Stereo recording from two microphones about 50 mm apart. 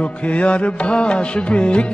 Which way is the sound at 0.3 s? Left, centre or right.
Left.